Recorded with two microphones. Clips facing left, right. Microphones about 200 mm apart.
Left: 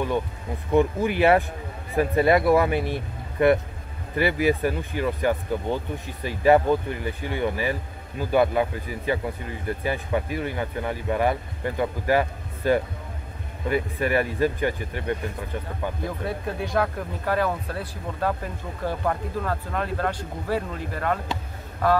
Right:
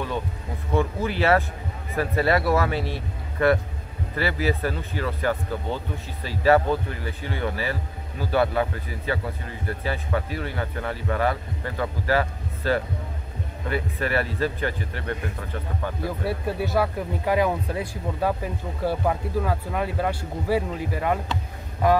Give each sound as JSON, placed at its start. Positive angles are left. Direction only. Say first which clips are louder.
{"t": 0.7, "sound": "speech", "louder": "left 4 dB", "side_deg": 15}
{"t": 16.0, "sound": "speech", "louder": "right 2 dB", "side_deg": -5}